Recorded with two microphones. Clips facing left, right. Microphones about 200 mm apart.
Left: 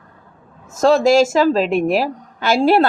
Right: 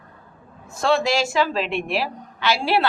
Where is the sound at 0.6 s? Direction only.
40° left (ahead or behind).